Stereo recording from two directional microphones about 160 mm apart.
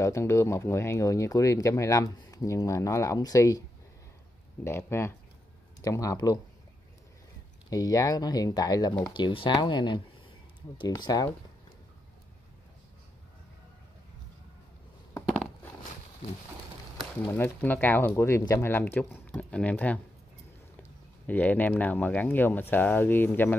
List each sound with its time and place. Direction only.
0.0 s speech: 15° left (ahead or behind)
4.6 s speech: 15° left (ahead or behind)
7.7 s speech: 20° left (ahead or behind)
17.2 s speech: 15° left (ahead or behind)
21.3 s speech: 10° left (ahead or behind)